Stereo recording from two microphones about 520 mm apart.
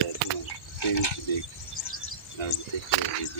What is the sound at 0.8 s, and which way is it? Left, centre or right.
Speech, left.